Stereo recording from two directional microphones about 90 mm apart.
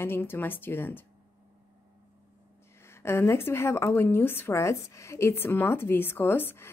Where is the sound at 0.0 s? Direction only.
25° left (ahead or behind).